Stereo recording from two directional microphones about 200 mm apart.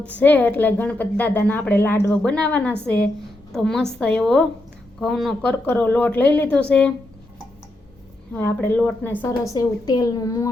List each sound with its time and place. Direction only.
0.0 s a woman's voice: 5° left (ahead or behind)
8.3 s a woman's voice: 10° left (ahead or behind)